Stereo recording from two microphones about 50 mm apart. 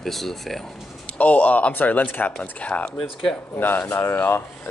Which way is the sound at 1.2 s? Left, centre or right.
Left.